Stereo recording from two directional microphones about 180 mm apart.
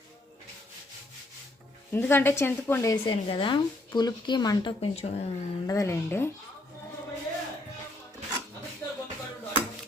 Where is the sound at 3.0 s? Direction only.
30° left (ahead or behind).